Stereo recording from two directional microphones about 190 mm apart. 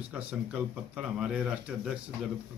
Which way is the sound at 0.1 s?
5° right (ahead or behind).